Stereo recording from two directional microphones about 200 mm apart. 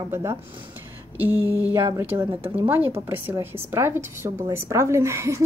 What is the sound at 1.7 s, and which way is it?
Speech, 15° right (ahead or behind).